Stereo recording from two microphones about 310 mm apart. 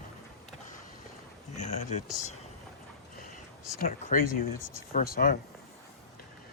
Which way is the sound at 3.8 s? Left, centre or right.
Left.